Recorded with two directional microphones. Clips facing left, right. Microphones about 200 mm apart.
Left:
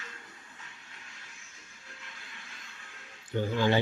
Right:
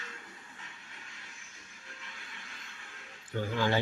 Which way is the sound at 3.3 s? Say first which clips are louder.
Left 3 dB; 20° left (ahead or behind).